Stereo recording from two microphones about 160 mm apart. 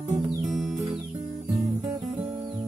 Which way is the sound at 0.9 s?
45° right (ahead or behind).